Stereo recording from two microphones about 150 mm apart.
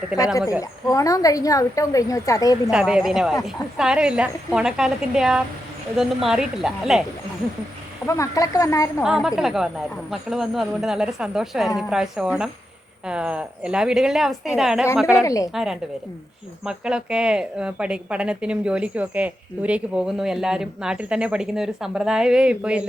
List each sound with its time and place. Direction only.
0.9 s a woman's voice: 25° left (ahead or behind)
2.6 s speech: 5° right (ahead or behind)
8.0 s a woman's voice: 20° left (ahead or behind)
9.0 s speech: 5° right (ahead or behind)
15.2 s a woman's voice: 20° left (ahead or behind)
15.5 s speech: 5° right (ahead or behind)